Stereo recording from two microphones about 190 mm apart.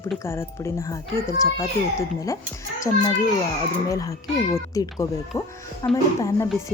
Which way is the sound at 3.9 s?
15° left (ahead or behind).